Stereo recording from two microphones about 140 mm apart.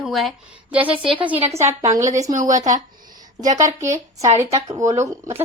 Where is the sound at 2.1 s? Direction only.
25° right (ahead or behind).